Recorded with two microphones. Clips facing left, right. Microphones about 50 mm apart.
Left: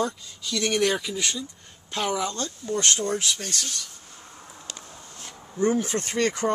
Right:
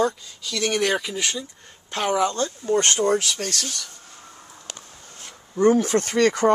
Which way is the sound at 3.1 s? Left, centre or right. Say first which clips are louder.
Right 6 dB; right.